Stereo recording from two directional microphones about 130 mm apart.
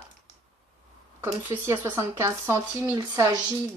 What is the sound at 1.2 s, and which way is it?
Speech, 20° right (ahead or behind).